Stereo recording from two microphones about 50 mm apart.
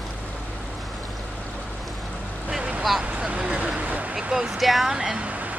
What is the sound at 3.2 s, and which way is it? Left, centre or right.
Vehicle, centre.